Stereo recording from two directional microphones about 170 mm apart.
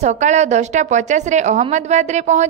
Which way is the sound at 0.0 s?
45° right (ahead or behind).